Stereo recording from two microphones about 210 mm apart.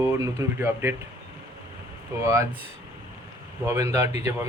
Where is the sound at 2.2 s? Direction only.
15° right (ahead or behind).